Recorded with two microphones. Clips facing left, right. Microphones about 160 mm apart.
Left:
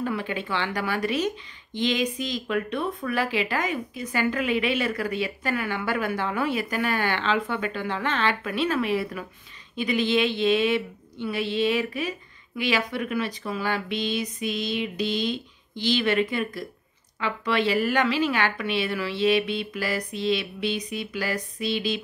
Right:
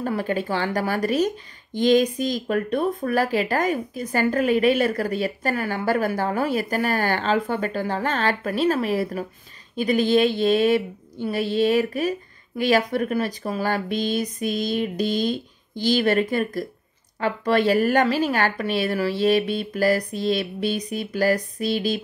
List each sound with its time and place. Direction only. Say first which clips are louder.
0.0 s speech: right 4 dB; 40° right (ahead or behind)